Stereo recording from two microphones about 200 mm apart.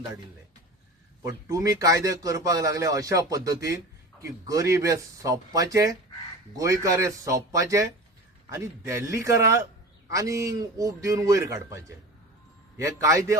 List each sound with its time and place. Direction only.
1.2 s speech: 15° right (ahead or behind)